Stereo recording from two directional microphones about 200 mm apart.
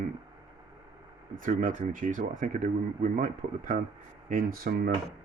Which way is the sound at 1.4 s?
40° right (ahead or behind).